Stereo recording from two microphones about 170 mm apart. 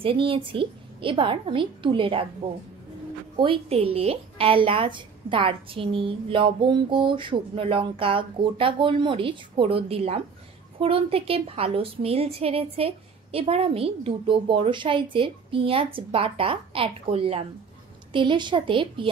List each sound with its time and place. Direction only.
0.0 s a woman's voice: 30° right (ahead or behind)
3.3 s a woman's voice: 35° right (ahead or behind)